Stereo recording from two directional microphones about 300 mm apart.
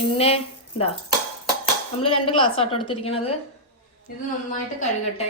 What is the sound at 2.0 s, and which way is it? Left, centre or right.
A woman's voice, centre.